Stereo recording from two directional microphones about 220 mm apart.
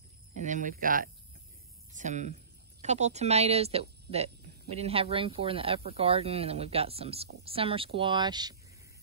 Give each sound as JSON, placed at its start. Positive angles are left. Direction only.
{"t": 0.4, "sound": "speech", "side_deg": -35}